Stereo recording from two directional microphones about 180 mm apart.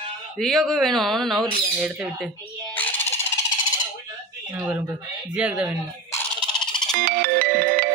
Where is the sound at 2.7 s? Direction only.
10° left (ahead or behind).